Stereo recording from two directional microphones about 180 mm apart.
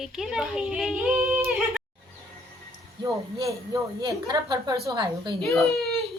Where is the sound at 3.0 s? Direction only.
20° right (ahead or behind).